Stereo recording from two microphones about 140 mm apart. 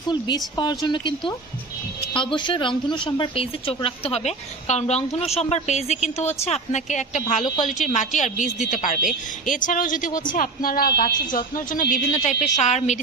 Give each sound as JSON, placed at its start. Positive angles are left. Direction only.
{"t": 0.1, "sound": "a woman's voice", "side_deg": 30}